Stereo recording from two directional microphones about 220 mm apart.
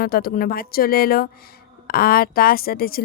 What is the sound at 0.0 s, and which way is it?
Speech, 45° left (ahead or behind).